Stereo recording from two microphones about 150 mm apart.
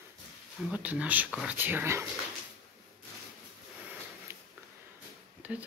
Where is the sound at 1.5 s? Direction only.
15° right (ahead or behind).